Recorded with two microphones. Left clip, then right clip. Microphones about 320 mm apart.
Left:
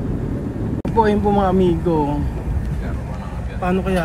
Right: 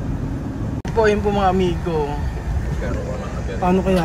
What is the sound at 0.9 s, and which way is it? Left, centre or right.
Speech, centre.